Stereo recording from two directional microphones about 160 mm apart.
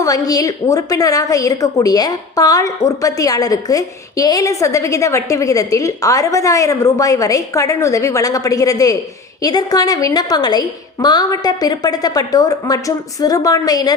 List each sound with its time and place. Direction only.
0.0 s a woman's voice: 20° left (ahead or behind)